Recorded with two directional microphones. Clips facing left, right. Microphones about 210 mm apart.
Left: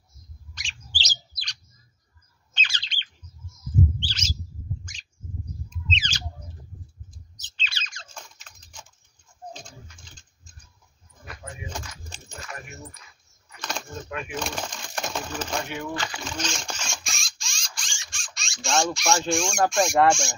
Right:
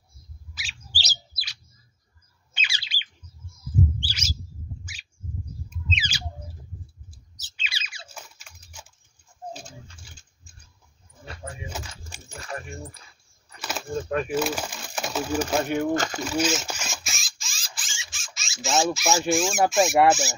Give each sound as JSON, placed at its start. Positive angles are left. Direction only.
{"t": 0.6, "sound": "bird", "side_deg": -5}
{"t": 5.7, "sound": "squawk", "side_deg": -10}
{"t": 7.1, "sound": "a sound", "side_deg": -10}
{"t": 9.9, "sound": "patter", "side_deg": -10}
{"t": 12.4, "sound": "keys jangling", "side_deg": -30}
{"t": 13.6, "sound": "a sound", "side_deg": -5}
{"t": 14.3, "sound": "speech", "side_deg": -5}
{"t": 15.7, "sound": "speech", "side_deg": -45}
{"t": 16.3, "sound": "bird", "side_deg": -5}
{"t": 17.4, "sound": "rodents", "side_deg": 0}
{"t": 18.1, "sound": "a sound", "side_deg": 0}
{"t": 19.7, "sound": "speech", "side_deg": 0}